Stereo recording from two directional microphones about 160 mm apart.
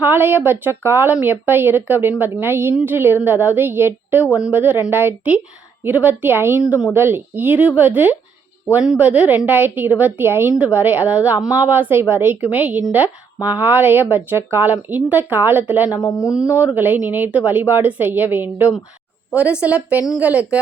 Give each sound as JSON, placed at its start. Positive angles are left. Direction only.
{"t": 0.0, "sound": "a woman's voice", "side_deg": -10}
{"t": 15.9, "sound": "speech", "side_deg": 20}
{"t": 16.6, "sound": "a woman's voice", "side_deg": -10}